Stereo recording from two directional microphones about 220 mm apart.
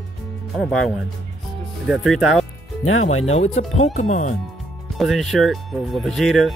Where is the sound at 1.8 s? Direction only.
Centre (ahead or behind).